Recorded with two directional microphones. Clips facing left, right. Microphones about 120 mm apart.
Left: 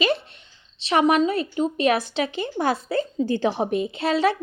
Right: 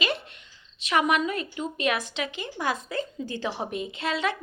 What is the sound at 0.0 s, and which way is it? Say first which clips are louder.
A woman's voice: left 7 dB; 30° left (ahead or behind).